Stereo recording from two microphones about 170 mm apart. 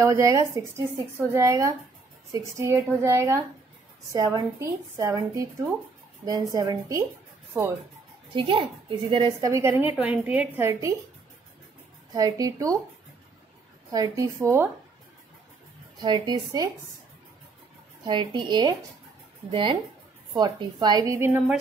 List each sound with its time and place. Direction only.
0.0 s a woman's voice: 20° right (ahead or behind)
8.4 s a woman's voice: 30° right (ahead or behind)
9.5 s a woman's voice: 15° right (ahead or behind)
12.1 s a woman's voice: 20° right (ahead or behind)
13.9 s a woman's voice: 20° right (ahead or behind)
16.0 s a woman's voice: 25° right (ahead or behind)
18.0 s a woman's voice: 30° right (ahead or behind)